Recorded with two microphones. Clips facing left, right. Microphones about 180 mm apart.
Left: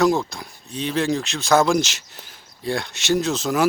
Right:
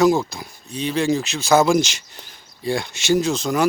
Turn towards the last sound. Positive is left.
turn(degrees=0)  # may be behind; listen again after turning